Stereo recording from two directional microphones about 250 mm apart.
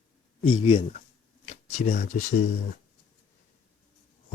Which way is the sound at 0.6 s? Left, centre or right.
Left.